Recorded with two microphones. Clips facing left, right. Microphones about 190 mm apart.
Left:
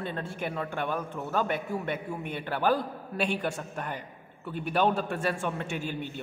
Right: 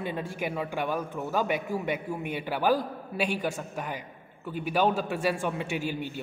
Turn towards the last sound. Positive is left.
turn(degrees=-10)  # may be behind; listen again after turning